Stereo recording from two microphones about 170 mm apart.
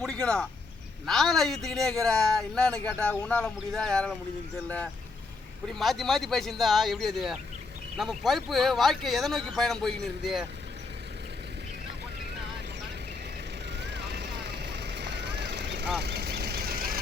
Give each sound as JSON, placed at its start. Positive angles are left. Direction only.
{"t": 0.0, "sound": "a sound", "side_deg": 5}
{"t": 1.0, "sound": "speech", "side_deg": 0}
{"t": 5.6, "sound": "speech", "side_deg": 0}
{"t": 13.8, "sound": "vehicle", "side_deg": -85}